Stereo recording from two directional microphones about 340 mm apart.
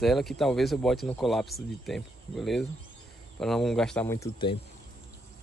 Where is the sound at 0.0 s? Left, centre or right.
Centre.